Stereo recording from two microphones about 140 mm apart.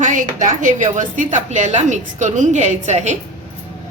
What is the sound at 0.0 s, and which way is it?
A woman's voice, 65° right (ahead or behind).